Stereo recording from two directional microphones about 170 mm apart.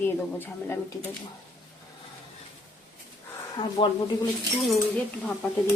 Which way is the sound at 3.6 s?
25° left (ahead or behind).